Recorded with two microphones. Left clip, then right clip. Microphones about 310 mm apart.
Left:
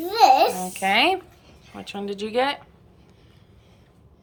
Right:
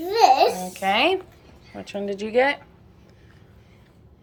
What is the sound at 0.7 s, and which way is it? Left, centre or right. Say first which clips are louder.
Speech: left 1 dB; centre.